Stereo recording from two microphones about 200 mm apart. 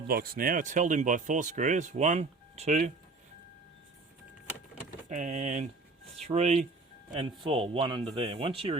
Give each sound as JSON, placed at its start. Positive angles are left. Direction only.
{"t": 0.1, "sound": "speech", "side_deg": -45}
{"t": 5.0, "sound": "speech", "side_deg": -35}